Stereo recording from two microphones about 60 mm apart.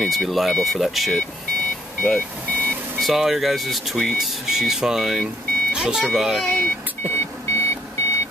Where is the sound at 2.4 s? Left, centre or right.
Right.